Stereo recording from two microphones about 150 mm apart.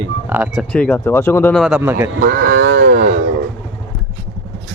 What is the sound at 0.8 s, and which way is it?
Speech, 10° left (ahead or behind).